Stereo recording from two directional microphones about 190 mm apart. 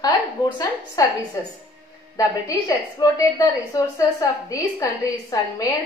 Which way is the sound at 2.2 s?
20° left (ahead or behind).